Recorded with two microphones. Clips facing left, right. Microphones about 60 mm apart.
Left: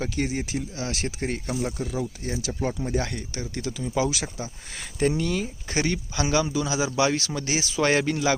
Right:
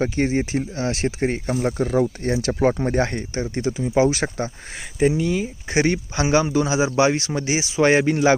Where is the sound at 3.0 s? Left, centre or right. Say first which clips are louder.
Right 7 dB; right.